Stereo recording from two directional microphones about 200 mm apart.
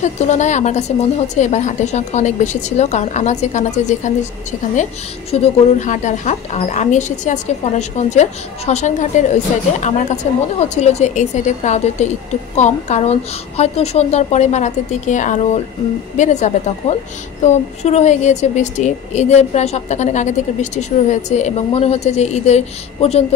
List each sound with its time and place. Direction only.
0.0 s a woman's voice: 35° left (ahead or behind)